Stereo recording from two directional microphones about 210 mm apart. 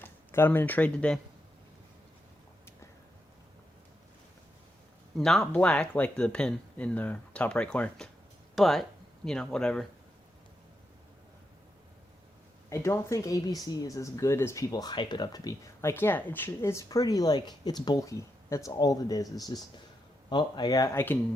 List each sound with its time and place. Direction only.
0.0 s speech: 10° left (ahead or behind)
5.1 s speech: centre (ahead or behind)
12.7 s speech: 15° left (ahead or behind)